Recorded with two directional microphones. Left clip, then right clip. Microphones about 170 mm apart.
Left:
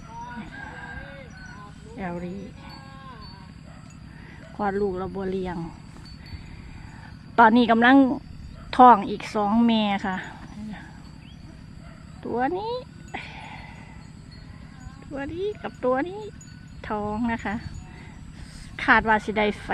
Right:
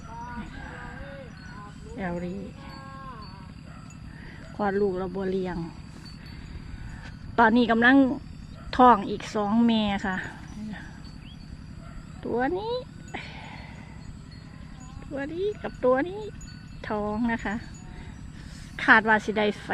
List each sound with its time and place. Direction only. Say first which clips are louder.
2.0 s speech: even; centre (ahead or behind)
4.5 s speech: even; centre (ahead or behind)
7.3 s a woman's voice: left 4 dB; 15° left (ahead or behind)
12.2 s a sound: left 1 dB; 10° left (ahead or behind)
15.1 s speech: even; 10° left (ahead or behind)
18.8 s a woman's voice: even; centre (ahead or behind)